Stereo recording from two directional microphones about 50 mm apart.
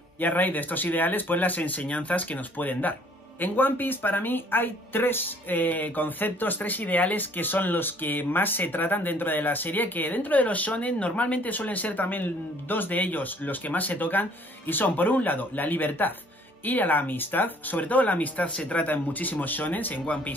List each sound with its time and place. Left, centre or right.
0.2 s speech: left